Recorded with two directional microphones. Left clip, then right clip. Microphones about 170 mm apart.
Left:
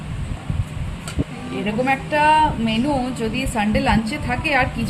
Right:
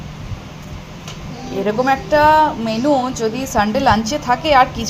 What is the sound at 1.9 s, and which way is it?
Speech, 20° right (ahead or behind).